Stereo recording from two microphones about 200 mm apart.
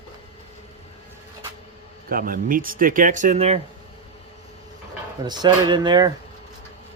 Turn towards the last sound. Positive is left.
turn(degrees=-20)  # may be behind; listen again after turning